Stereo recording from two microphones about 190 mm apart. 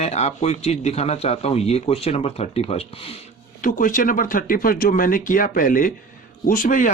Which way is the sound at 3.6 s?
45° left (ahead or behind).